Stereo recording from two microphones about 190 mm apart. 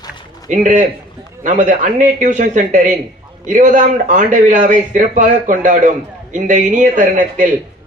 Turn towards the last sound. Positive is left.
turn(degrees=-40)  # may be behind; listen again after turning